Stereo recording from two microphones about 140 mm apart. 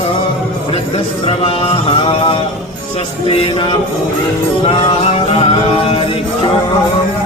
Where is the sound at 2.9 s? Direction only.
45° left (ahead or behind).